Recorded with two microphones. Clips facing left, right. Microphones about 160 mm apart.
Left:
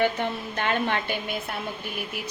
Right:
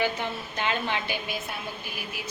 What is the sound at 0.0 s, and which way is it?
A woman's voice, 55° left (ahead or behind).